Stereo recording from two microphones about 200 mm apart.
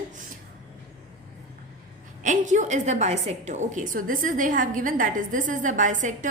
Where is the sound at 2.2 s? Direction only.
40° right (ahead or behind).